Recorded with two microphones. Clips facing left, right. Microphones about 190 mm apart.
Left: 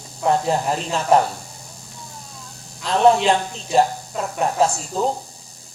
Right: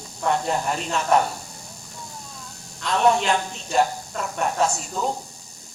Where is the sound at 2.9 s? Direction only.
35° left (ahead or behind).